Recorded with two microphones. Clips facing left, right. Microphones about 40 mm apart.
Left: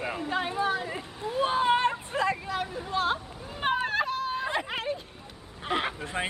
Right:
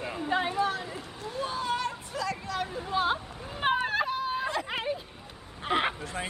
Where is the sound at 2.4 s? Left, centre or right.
Centre.